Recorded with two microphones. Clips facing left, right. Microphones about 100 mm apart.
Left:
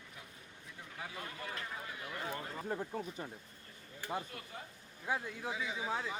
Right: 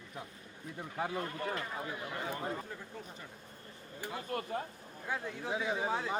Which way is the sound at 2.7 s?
45° left (ahead or behind).